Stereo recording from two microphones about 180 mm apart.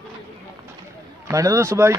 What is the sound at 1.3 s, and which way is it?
Speech, 15° right (ahead or behind).